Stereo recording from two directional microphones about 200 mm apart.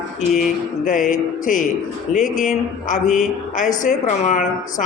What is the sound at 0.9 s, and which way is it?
A woman's voice, 40° left (ahead or behind).